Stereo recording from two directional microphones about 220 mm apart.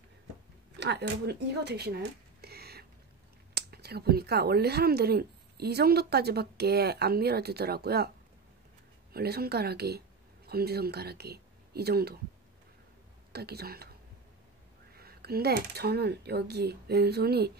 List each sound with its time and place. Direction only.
0.7 s speech: 50° right (ahead or behind)
9.1 s speech: 45° right (ahead or behind)
13.3 s speech: 45° right (ahead or behind)
15.0 s speech: 45° right (ahead or behind)